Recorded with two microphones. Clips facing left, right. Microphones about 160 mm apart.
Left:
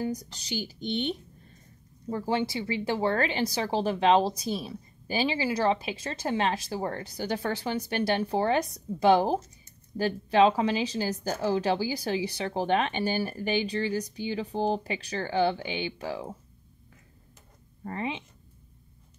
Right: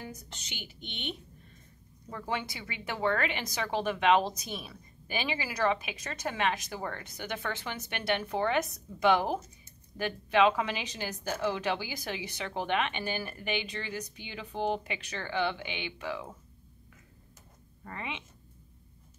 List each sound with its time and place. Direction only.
0.0 s speech: 35° left (ahead or behind)
17.8 s speech: 35° left (ahead or behind)